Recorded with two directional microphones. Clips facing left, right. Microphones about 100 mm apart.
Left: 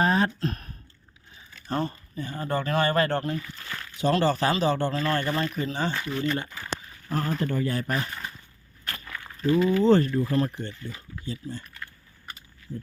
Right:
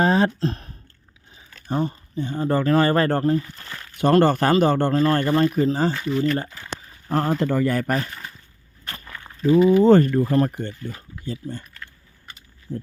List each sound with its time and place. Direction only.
0.0 s speech: 30° right (ahead or behind)
1.6 s speech: 15° right (ahead or behind)
2.5 s speech: 35° right (ahead or behind)
3.9 s speech: 55° right (ahead or behind); by 5.9 s 40° right (ahead or behind)
7.1 s speech: 65° right (ahead or behind)
7.7 s speech: 50° right (ahead or behind)
8.9 s a sound: 30° right (ahead or behind)
9.5 s speech: 15° right (ahead or behind)
9.8 s speech: 50° right (ahead or behind)
12.7 s heart sounds: 65° right (ahead or behind)